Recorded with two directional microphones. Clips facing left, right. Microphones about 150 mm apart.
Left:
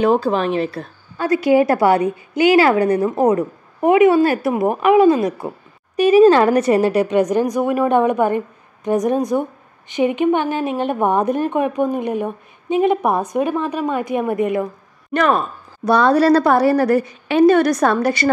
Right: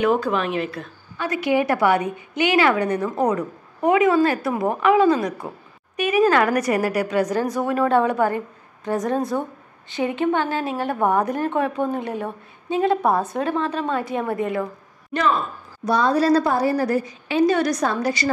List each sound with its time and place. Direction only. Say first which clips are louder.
0.0 s a woman's voice: left 4 dB; 30° left (ahead or behind)
15.1 s a woman's voice: left 4 dB; 60° left (ahead or behind)